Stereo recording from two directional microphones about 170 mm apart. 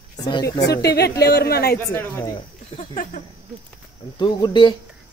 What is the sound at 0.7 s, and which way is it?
Speech, 70° left (ahead or behind).